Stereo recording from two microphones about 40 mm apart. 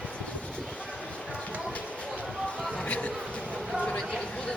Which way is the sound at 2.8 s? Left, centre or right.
Left.